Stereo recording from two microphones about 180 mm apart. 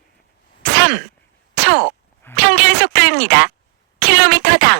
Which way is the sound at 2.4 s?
75° right (ahead or behind).